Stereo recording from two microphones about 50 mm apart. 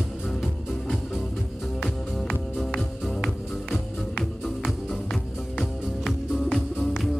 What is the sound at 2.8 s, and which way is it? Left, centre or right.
Music, centre.